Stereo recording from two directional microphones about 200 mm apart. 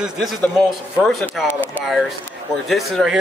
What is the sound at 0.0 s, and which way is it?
A man's voice, centre (ahead or behind).